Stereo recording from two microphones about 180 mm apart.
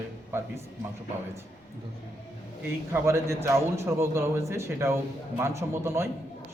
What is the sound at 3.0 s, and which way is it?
A man's voice, 15° right (ahead or behind).